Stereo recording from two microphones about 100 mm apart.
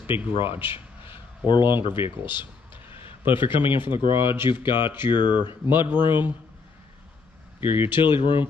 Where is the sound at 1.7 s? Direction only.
55° left (ahead or behind).